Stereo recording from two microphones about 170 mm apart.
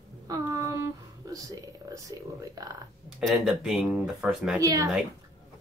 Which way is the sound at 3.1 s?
Centre (ahead or behind).